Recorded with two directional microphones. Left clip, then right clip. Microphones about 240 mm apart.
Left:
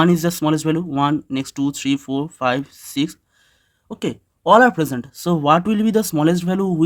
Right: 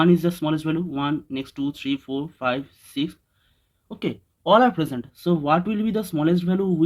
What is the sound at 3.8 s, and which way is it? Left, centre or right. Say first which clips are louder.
Speech: left 4 dB; left.